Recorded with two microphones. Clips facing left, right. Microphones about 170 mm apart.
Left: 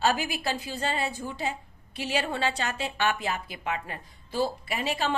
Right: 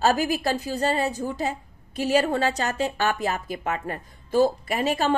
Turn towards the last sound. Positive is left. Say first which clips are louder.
# right 6 dB
turn(degrees=-45)  # may be behind; listen again after turning